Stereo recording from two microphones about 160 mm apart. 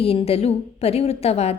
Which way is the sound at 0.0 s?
40° left (ahead or behind).